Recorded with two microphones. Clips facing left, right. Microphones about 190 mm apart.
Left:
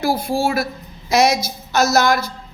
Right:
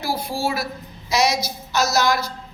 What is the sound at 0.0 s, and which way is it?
Speech, 50° left (ahead or behind).